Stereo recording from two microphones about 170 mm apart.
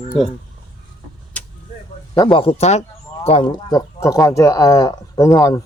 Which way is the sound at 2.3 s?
35° left (ahead or behind).